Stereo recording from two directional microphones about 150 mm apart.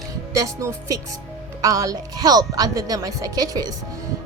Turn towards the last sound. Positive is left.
turn(degrees=-25)  # may be behind; listen again after turning